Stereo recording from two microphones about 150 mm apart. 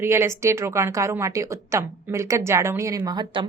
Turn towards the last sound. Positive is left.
turn(degrees=-30)  # may be behind; listen again after turning